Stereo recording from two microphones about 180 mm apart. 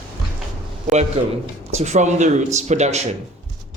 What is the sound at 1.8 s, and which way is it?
Speech, 40° right (ahead or behind).